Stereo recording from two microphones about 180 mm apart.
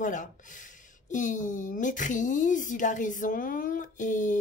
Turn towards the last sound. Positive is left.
turn(degrees=45)  # may be behind; listen again after turning